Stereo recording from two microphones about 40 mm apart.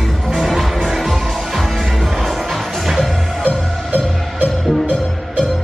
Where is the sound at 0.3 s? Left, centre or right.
Centre.